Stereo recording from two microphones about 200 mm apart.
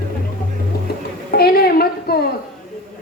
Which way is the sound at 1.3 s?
50° left (ahead or behind).